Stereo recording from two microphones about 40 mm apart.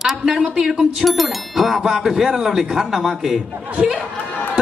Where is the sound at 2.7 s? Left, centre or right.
Centre.